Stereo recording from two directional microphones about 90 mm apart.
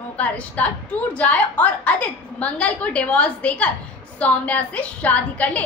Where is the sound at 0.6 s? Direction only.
20° left (ahead or behind).